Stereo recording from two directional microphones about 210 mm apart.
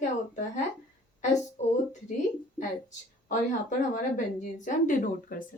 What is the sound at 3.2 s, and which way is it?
A woman's voice, 35° left (ahead or behind).